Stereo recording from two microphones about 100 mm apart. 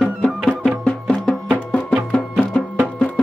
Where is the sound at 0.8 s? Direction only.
5° left (ahead or behind).